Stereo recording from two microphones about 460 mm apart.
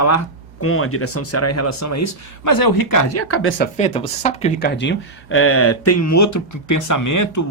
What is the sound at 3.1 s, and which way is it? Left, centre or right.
Speech, left.